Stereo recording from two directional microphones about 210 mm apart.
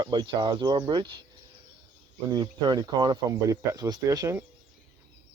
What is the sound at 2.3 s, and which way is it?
Speech, 20° right (ahead or behind).